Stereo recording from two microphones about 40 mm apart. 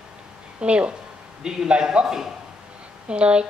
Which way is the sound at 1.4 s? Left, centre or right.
Right.